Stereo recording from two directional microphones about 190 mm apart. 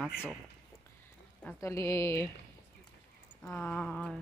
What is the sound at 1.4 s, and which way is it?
Speech, 15° left (ahead or behind).